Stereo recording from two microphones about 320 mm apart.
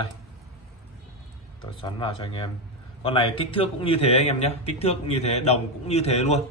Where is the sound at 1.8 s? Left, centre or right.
Centre.